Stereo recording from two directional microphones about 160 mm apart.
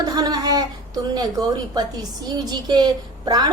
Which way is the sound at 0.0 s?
25° right (ahead or behind).